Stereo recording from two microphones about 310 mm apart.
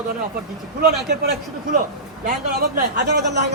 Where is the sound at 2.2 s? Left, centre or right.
Right.